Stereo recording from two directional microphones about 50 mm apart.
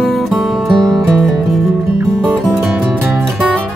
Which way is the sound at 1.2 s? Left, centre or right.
Centre.